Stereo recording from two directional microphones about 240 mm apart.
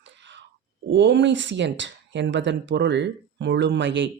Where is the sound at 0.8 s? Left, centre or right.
Right.